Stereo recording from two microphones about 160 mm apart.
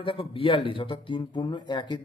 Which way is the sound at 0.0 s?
35° left (ahead or behind).